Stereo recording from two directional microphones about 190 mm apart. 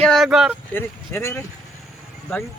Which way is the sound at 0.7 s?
15° left (ahead or behind).